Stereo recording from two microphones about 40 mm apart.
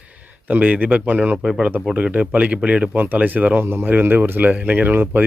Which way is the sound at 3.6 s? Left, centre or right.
Right.